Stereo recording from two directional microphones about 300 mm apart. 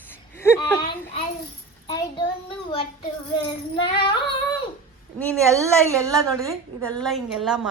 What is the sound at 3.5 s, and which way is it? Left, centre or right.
Music, centre.